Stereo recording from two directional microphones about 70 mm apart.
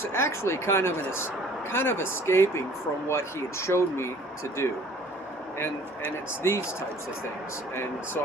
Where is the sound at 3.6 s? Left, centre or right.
Left.